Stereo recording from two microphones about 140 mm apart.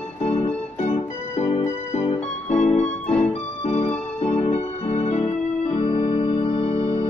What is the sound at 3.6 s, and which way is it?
Music, 50° left (ahead or behind).